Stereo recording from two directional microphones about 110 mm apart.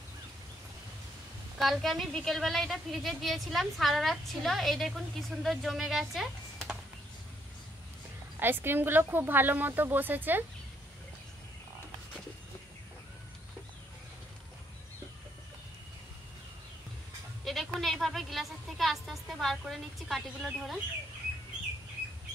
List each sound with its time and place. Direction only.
1.6 s a woman's voice: centre (ahead or behind)
8.4 s a woman's voice: 20° right (ahead or behind)
17.5 s a sound: centre (ahead or behind)
19.6 s a woman's voice: centre (ahead or behind)